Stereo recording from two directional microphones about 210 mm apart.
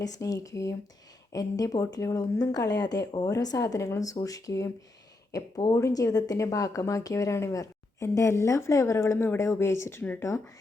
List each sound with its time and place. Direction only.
0.0 s speech: 15° left (ahead or behind)